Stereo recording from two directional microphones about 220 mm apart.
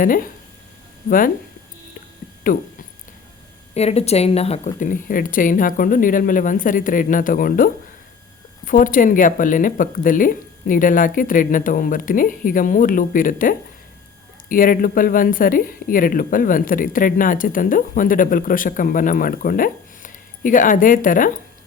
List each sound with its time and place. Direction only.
0.0 s speech: 40° left (ahead or behind)
2.5 s speech: 40° left (ahead or behind)
3.8 s speech: 30° left (ahead or behind)